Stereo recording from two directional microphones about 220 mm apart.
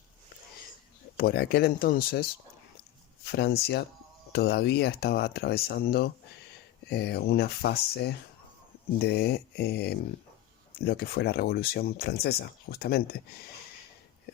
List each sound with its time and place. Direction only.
1.1 s speech: 45° left (ahead or behind)
3.2 s speech: 45° left (ahead or behind)